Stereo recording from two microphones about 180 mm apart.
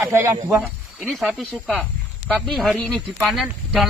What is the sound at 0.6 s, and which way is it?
A man's voice, centre (ahead or behind).